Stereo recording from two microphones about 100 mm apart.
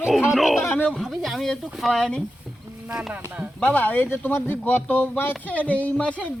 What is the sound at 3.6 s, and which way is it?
Speech, 15° left (ahead or behind).